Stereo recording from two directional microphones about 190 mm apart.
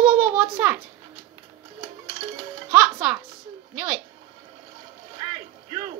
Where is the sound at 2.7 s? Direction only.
5° right (ahead or behind).